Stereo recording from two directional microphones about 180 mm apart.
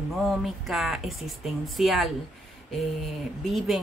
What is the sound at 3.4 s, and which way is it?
Speech, centre (ahead or behind).